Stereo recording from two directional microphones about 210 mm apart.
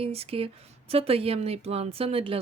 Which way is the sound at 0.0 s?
30° right (ahead or behind).